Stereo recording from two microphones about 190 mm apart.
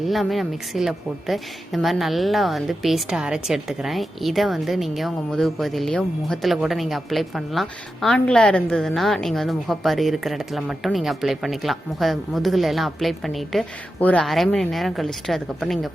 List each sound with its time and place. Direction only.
0.0 s a woman's voice: centre (ahead or behind)